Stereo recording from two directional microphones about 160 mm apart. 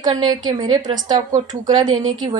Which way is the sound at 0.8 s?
55° right (ahead or behind).